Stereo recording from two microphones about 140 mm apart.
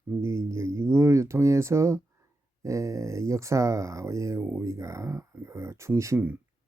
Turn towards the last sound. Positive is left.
turn(degrees=-15)  # may be behind; listen again after turning